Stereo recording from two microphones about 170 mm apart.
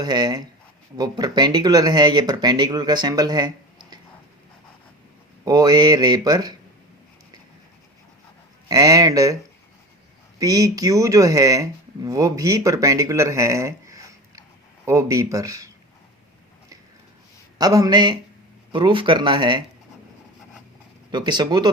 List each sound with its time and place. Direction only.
0.0 s speech: 25° right (ahead or behind)
5.5 s speech: 20° right (ahead or behind)
8.7 s speech: 20° right (ahead or behind)
10.4 s speech: 20° right (ahead or behind)
17.6 s speech: 20° right (ahead or behind)
21.1 s speech: 25° right (ahead or behind)